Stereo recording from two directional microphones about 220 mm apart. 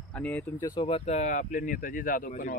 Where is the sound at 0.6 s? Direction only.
20° left (ahead or behind).